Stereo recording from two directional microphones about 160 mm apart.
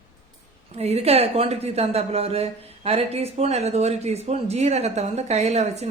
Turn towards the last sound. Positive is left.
turn(degrees=-40)  # may be behind; listen again after turning